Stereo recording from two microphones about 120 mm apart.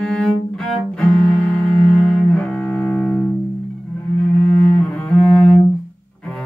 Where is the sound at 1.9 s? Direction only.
5° left (ahead or behind).